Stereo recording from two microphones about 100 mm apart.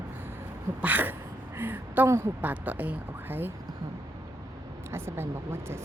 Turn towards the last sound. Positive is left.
turn(degrees=-25)  # may be behind; listen again after turning